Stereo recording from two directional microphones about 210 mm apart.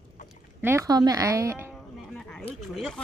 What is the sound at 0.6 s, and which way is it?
Speech, 15° right (ahead or behind).